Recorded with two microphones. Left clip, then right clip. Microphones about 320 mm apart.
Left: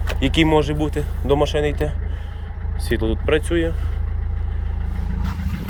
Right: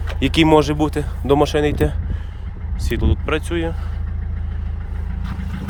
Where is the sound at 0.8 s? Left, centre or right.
Right.